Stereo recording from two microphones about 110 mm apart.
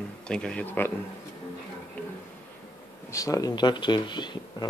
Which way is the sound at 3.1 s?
30° left (ahead or behind).